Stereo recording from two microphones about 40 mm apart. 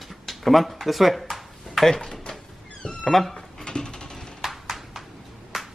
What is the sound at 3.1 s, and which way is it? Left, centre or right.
Speech, centre.